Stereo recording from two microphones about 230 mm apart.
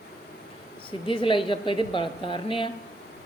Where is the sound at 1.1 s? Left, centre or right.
Left.